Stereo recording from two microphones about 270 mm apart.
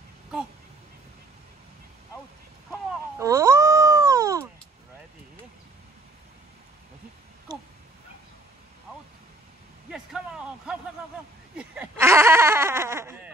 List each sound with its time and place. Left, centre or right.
3.2 s wail: centre
7.5 s dog: centre
9.8 s a sound: centre
11.5 s goat: centre